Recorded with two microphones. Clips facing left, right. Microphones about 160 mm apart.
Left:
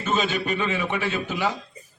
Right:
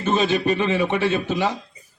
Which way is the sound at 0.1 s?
35° right (ahead or behind).